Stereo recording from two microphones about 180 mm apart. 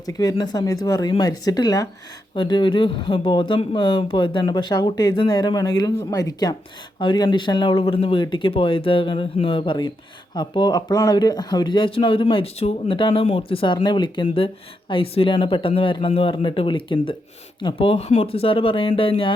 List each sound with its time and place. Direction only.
0.0 s speech: 20° left (ahead or behind)